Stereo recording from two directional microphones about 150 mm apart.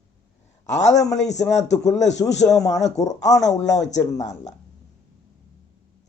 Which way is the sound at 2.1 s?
20° left (ahead or behind).